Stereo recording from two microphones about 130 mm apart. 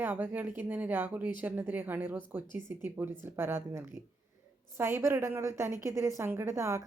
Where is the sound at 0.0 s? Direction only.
15° right (ahead or behind).